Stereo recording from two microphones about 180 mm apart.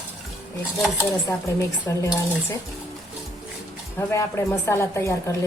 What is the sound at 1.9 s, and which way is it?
Speech, 15° left (ahead or behind).